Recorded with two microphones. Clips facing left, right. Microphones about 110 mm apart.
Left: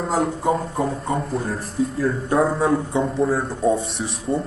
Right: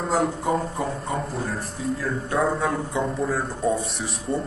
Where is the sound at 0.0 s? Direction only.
Centre (ahead or behind).